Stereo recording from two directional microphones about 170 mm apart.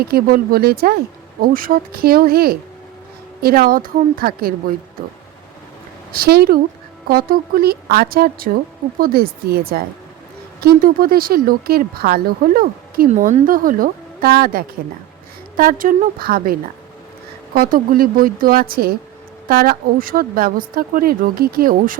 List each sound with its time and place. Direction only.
0.0 s speech: 60° right (ahead or behind)
6.1 s speech: 65° right (ahead or behind)
13.1 s speech: 45° right (ahead or behind)